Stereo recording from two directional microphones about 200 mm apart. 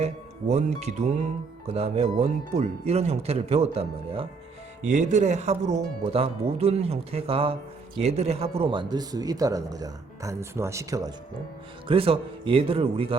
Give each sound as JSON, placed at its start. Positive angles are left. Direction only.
{"t": 0.0, "sound": "a man's voice", "side_deg": -35}
{"t": 11.9, "sound": "a man's voice", "side_deg": -30}